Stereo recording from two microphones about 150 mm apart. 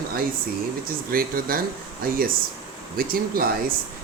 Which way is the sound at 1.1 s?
75° right (ahead or behind).